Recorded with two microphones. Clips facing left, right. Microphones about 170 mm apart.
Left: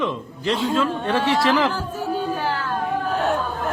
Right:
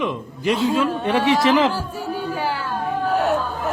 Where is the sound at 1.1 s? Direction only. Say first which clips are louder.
Right 3 dB; 15° right (ahead or behind).